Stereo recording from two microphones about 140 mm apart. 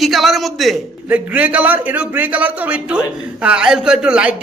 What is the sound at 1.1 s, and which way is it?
A man's voice, 10° right (ahead or behind).